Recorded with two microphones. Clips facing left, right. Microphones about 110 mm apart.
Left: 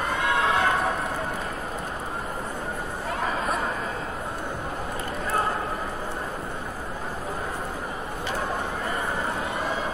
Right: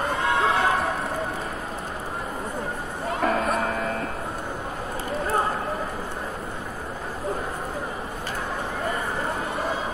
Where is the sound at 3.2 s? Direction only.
60° right (ahead or behind).